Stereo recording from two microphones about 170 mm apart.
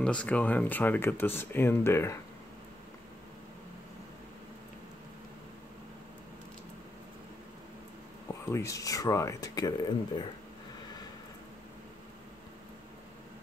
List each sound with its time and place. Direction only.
0.0 s speech: 5° left (ahead or behind)
8.5 s speech: 15° left (ahead or behind)